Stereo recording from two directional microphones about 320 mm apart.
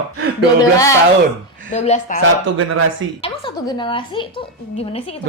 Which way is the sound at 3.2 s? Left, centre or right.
Centre.